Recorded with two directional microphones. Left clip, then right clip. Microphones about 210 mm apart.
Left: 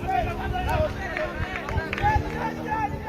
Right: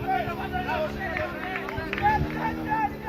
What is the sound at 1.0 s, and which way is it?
Run, 45° left (ahead or behind).